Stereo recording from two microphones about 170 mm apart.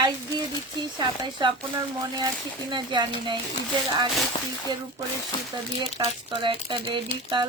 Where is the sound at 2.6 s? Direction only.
25° right (ahead or behind).